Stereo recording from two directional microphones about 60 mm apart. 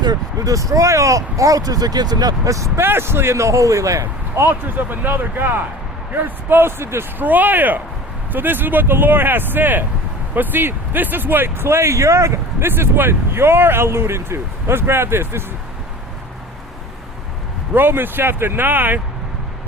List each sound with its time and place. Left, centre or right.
0.1 s speech: right
2.7 s speech: right
4.4 s speech: right
7.2 s speech: right
12.6 s speech: right
17.7 s speech: right